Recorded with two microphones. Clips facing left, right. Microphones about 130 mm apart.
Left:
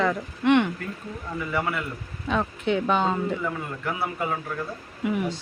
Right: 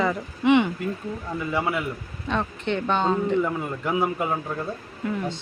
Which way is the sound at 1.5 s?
15° right (ahead or behind).